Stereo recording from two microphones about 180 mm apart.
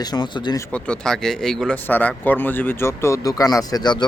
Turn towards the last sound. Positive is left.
turn(degrees=25)  # may be behind; listen again after turning